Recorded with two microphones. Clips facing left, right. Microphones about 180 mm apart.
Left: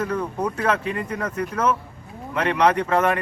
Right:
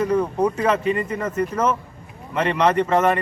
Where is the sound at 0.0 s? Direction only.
10° right (ahead or behind).